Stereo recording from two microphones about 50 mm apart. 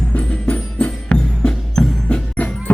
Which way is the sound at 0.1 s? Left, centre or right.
Left.